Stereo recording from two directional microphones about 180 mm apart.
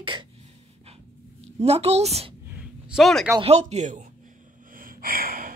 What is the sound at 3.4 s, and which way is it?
Speech, 35° right (ahead or behind).